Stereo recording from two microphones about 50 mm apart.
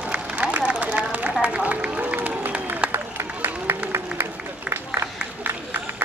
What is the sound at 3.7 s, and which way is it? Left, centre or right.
Applause, right.